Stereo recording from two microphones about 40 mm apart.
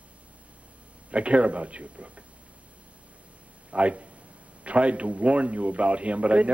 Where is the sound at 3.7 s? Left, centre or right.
Right.